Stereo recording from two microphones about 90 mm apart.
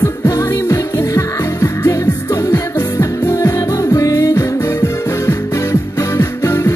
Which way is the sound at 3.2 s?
35° left (ahead or behind).